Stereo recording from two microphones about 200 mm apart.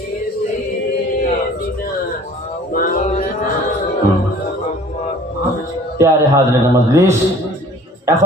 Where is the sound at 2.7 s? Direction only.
45° left (ahead or behind).